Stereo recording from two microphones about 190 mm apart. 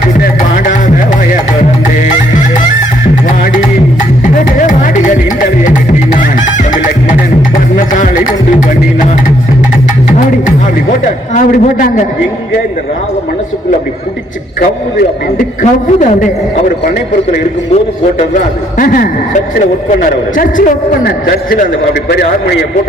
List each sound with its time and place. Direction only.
0.2 s music: 45° left (ahead or behind)
2.1 s music: 40° left (ahead or behind)
11.3 s a sound: 45° left (ahead or behind)
14.9 s a man's voice: 45° left (ahead or behind)
18.2 s a man's voice: 45° left (ahead or behind)